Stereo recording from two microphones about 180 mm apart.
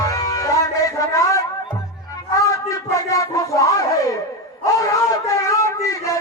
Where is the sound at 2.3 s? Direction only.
20° left (ahead or behind).